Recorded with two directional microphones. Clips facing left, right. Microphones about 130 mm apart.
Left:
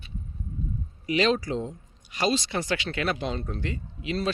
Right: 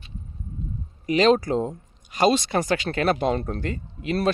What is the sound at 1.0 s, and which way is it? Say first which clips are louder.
Speech: right 6 dB; 45° right (ahead or behind).